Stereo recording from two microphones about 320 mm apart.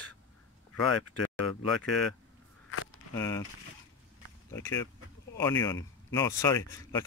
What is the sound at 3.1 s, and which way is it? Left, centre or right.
Speech, centre.